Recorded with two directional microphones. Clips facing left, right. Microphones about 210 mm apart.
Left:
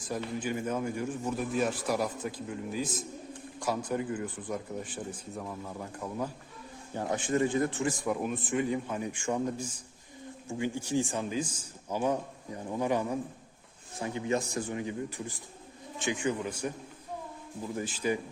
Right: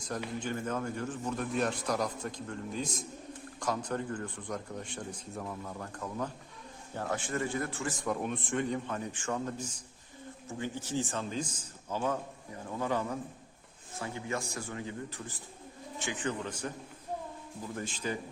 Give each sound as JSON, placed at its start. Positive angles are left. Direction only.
{"t": 0.3, "sound": "a man's voice", "side_deg": 10}
{"t": 17.7, "sound": "speech", "side_deg": 10}